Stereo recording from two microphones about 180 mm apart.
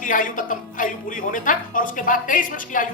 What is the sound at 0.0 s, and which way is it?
A woman's voice, 50° left (ahead or behind).